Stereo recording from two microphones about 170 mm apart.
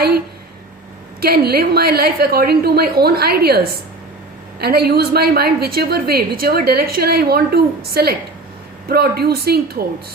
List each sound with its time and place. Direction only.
1.2 s a woman's voice: 65° right (ahead or behind)